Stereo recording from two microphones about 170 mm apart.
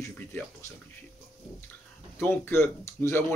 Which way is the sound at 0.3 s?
10° left (ahead or behind).